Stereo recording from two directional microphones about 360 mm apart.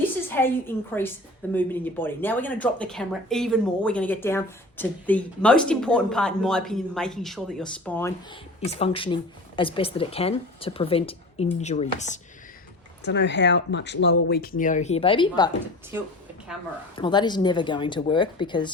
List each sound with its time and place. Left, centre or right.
0.3 s speech: centre
8.6 s speech: centre
15.9 s a woman's voice: centre
17.0 s speech: centre